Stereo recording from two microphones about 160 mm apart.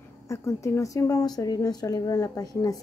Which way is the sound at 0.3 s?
20° left (ahead or behind).